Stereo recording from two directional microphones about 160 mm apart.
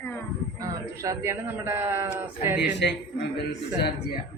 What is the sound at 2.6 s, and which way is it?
Speech, 90° left.